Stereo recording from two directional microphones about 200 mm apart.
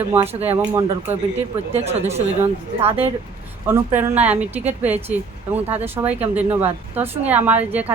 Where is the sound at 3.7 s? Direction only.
10° right (ahead or behind).